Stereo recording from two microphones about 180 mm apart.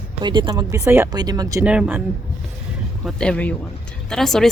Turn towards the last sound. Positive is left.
turn(degrees=0)  # may be behind; listen again after turning